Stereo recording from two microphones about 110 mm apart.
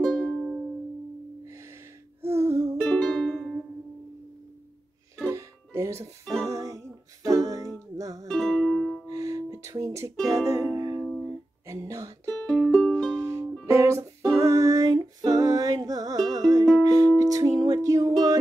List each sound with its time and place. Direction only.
0.2 s music: centre (ahead or behind)
1.4 s music: 25° right (ahead or behind)
2.8 s music: 10° left (ahead or behind)
5.3 s music: 25° right (ahead or behind)
6.2 s music: centre (ahead or behind)
6.5 s music: 30° right (ahead or behind)
8.3 s music: 5° left (ahead or behind)
9.0 s music: 30° right (ahead or behind)
10.1 s music: 5° left (ahead or behind)
10.5 s music: 25° right (ahead or behind)
11.6 s speech: 30° right (ahead or behind)
12.4 s music: 5° left (ahead or behind)
13.1 s music: 25° right (ahead or behind)